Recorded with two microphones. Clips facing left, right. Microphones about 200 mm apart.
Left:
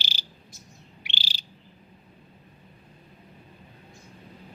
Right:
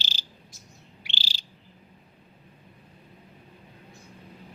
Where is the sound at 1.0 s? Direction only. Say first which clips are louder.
Even; 15° left (ahead or behind).